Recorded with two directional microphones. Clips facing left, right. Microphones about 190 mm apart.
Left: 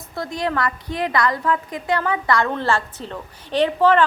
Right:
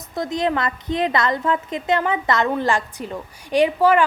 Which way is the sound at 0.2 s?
20° right (ahead or behind).